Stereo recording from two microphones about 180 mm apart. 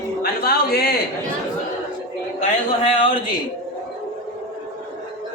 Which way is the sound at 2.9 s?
30° left (ahead or behind).